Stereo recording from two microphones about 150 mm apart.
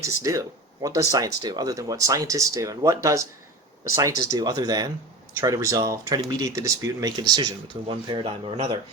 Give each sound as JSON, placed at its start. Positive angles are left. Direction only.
{"t": 0.0, "sound": "speech", "side_deg": -20}